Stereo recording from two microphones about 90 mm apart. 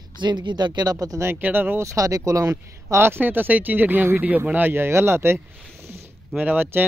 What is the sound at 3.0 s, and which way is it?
Speech, 25° right (ahead or behind).